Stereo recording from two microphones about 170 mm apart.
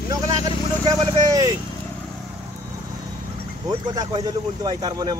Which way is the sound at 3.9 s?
25° right (ahead or behind).